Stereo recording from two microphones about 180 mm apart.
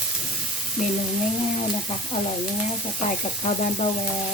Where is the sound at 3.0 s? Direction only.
40° left (ahead or behind).